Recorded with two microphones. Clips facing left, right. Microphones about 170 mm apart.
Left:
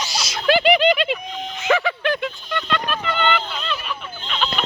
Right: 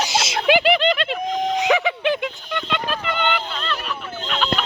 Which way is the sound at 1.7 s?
20° right (ahead or behind).